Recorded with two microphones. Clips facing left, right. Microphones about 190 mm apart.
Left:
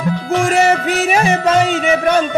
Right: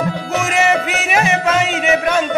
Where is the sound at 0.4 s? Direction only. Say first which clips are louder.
Left 2 dB; 35° left (ahead or behind).